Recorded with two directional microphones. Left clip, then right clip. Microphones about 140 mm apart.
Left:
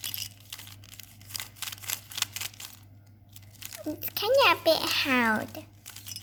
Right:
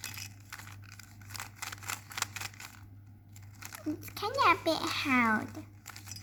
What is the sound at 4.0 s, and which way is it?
A child's voice, 55° left (ahead or behind).